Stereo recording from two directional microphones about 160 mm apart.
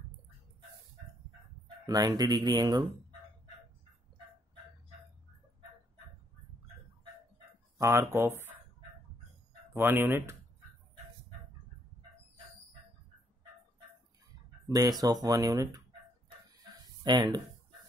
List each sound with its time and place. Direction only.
1.9 s speech: 25° right (ahead or behind)
7.7 s speech: 20° right (ahead or behind)
9.8 s speech: 15° right (ahead or behind)
14.7 s speech: 20° right (ahead or behind)
16.7 s a sound: 25° right (ahead or behind)